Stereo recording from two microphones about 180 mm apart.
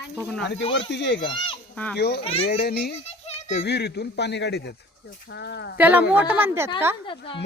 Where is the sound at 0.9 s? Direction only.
75° left (ahead or behind).